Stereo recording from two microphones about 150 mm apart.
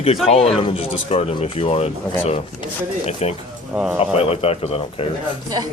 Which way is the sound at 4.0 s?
40° left (ahead or behind).